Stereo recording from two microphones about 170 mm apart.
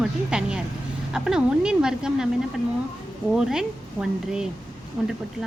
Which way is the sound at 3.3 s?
5° right (ahead or behind).